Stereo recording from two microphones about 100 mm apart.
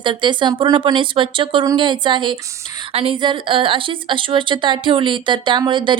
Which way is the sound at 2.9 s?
65° right (ahead or behind).